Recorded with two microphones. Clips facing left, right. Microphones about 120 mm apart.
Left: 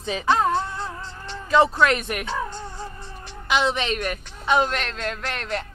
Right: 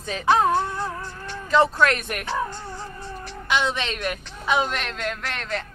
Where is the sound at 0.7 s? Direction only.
20° left (ahead or behind).